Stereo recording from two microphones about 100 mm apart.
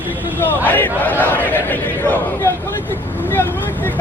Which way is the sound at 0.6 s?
20° left (ahead or behind).